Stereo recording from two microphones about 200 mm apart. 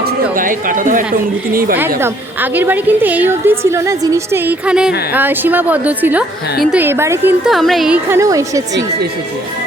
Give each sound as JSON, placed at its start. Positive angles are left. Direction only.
{"t": 0.0, "sound": "speech", "side_deg": -45}
{"t": 2.0, "sound": "a woman's voice", "side_deg": -10}
{"t": 7.4, "sound": "a woman's voice", "side_deg": 0}